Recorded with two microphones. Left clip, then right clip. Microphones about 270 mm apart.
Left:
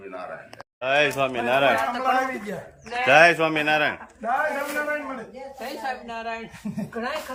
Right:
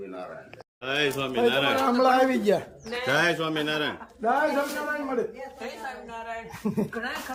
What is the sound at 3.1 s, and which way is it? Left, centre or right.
Speech, centre.